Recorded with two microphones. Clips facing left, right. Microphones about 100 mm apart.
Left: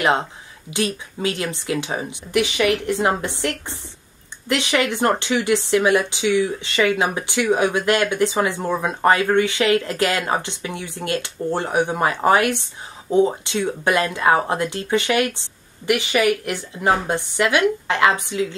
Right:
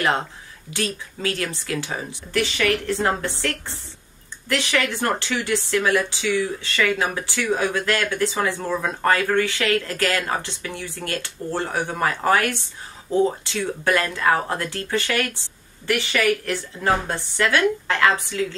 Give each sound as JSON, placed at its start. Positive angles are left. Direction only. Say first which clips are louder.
{"t": 0.7, "sound": "speech", "louder": "left 4 dB", "side_deg": 20}